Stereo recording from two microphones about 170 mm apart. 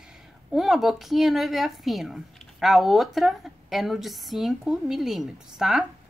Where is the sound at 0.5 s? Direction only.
Centre (ahead or behind).